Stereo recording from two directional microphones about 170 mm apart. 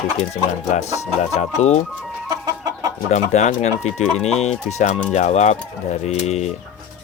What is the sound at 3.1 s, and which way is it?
Speech, 45° left (ahead or behind).